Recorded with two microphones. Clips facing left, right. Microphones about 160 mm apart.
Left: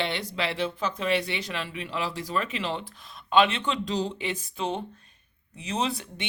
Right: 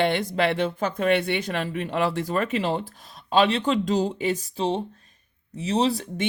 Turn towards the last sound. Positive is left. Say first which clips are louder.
# right 6 dB
turn(degrees=-40)  # may be behind; listen again after turning